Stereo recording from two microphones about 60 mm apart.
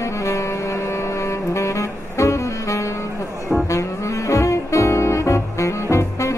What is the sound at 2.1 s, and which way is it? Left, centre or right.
Saxophone, left.